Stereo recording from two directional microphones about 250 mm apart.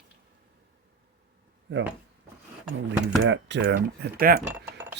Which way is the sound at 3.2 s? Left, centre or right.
Right.